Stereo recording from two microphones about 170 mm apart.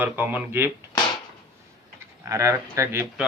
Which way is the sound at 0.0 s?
10° right (ahead or behind).